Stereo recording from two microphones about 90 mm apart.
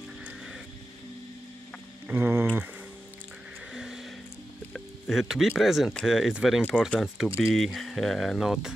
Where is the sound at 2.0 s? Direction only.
25° right (ahead or behind).